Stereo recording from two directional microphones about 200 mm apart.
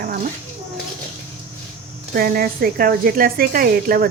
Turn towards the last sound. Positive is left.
turn(degrees=-45)  # may be behind; listen again after turning